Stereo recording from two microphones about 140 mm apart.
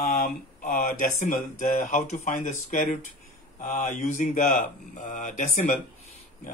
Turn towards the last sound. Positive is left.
turn(degrees=60)  # may be behind; listen again after turning